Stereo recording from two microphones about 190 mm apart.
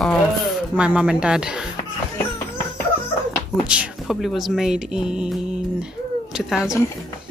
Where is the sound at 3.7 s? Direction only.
5° right (ahead or behind).